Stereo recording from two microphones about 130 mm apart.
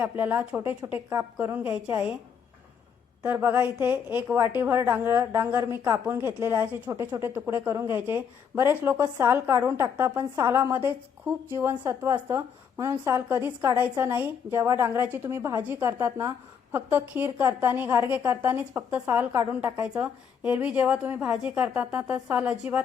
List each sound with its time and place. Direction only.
0.0 s a woman's voice: 10° right (ahead or behind)
3.2 s a woman's voice: 15° right (ahead or behind)